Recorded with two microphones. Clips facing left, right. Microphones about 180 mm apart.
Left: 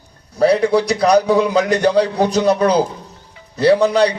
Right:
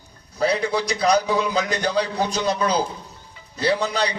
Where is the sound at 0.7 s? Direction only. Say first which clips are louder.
Left 6 dB; 65° left (ahead or behind).